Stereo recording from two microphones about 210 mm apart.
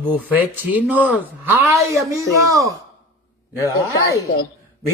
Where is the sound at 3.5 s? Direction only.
15° left (ahead or behind).